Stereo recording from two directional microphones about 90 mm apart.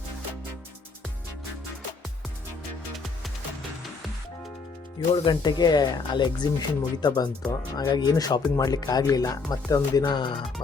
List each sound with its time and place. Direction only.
2.9 s music: centre (ahead or behind)
5.1 s speech: 60° left (ahead or behind); by 10.0 s 40° left (ahead or behind)
10.0 s speech: 60° left (ahead or behind)